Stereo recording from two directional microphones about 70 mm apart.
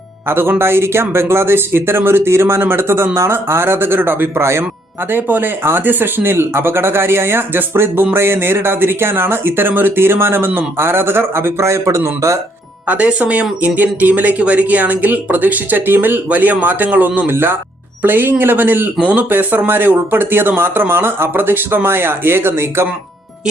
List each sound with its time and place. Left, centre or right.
0.3 s speech: right
12.9 s speech: centre; by 22.9 s right